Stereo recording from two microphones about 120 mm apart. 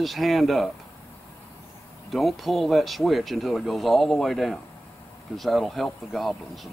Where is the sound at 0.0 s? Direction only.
Centre (ahead or behind).